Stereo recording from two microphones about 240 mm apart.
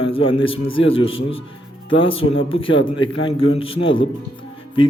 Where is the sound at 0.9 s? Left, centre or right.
Left.